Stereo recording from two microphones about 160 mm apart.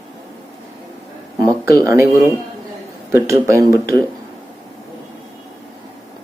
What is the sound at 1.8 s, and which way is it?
Speech, 20° right (ahead or behind).